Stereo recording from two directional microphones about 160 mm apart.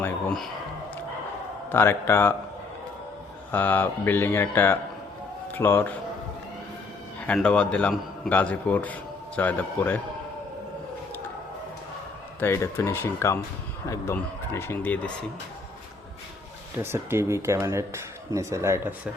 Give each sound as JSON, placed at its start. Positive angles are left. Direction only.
{"t": 0.0, "sound": "a sound", "side_deg": 5}
{"t": 1.7, "sound": "a man's voice", "side_deg": 15}
{"t": 3.5, "sound": "a man's voice", "side_deg": 10}
{"t": 7.3, "sound": "a man's voice", "side_deg": 5}
{"t": 12.4, "sound": "a man's voice", "side_deg": 15}
{"t": 16.7, "sound": "speech", "side_deg": -15}